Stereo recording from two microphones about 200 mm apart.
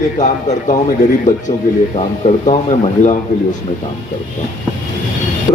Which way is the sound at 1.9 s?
30° left (ahead or behind).